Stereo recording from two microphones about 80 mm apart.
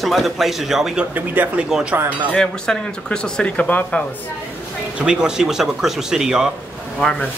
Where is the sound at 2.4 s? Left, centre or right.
Centre.